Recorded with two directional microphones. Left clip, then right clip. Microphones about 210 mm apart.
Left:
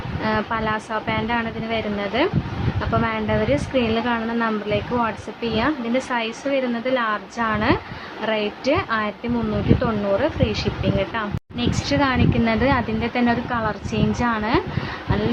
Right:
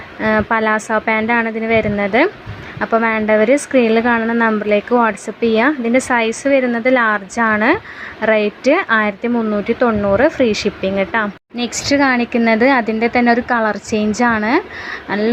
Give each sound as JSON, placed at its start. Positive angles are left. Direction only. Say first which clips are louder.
{"t": 0.2, "sound": "a woman's voice", "louder": "right 8 dB", "side_deg": -30}